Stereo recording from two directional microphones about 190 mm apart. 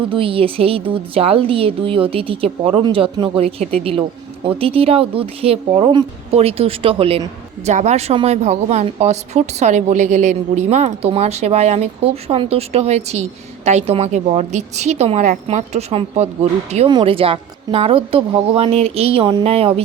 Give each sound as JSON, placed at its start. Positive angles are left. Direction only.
{"t": 0.1, "sound": "a woman's voice", "side_deg": -30}